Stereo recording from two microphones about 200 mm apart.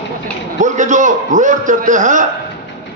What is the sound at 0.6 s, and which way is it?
A man's voice, 40° right (ahead or behind).